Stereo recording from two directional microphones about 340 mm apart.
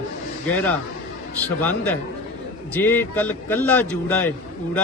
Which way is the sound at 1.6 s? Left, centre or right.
Centre.